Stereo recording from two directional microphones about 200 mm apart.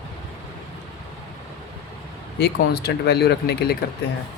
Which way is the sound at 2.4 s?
55° left (ahead or behind).